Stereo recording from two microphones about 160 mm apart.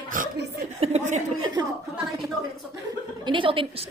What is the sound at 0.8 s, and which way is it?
Chuckle, 45° right (ahead or behind).